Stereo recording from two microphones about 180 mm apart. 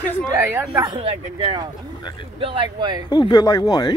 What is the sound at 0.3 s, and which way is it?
Speech, 20° right (ahead or behind).